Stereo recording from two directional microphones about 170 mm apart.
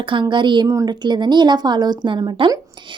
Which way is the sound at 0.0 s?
30° right (ahead or behind).